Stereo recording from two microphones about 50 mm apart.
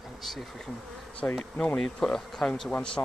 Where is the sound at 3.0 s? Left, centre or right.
Left.